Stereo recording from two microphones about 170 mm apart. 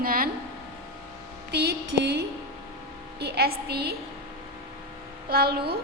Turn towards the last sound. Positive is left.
turn(degrees=-70)  # may be behind; listen again after turning